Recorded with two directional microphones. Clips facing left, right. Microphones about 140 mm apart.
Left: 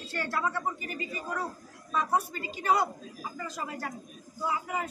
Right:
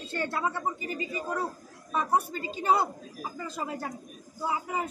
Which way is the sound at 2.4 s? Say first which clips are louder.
Right 1 dB; 25° right (ahead or behind).